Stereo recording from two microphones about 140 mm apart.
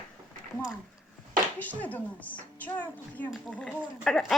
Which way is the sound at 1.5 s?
10° left (ahead or behind).